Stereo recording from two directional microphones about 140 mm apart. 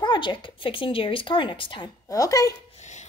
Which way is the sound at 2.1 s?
25° left (ahead or behind).